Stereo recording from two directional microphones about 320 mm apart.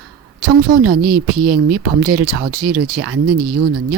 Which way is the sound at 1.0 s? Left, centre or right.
Right.